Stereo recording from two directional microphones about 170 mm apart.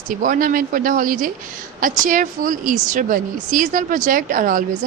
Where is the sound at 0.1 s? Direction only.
50° right (ahead or behind).